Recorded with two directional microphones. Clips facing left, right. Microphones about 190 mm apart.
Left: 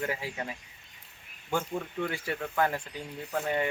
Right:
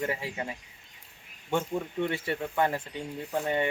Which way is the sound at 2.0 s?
25° right (ahead or behind).